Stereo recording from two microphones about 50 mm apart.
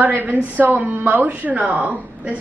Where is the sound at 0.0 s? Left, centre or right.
Right.